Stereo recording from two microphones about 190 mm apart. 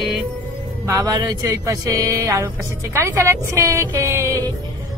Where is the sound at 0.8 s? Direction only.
15° right (ahead or behind).